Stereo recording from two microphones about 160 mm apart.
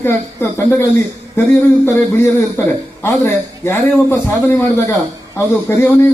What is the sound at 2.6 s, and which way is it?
A man's voice, 15° left (ahead or behind).